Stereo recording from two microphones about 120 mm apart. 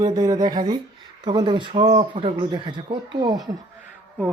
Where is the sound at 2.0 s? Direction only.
50° right (ahead or behind).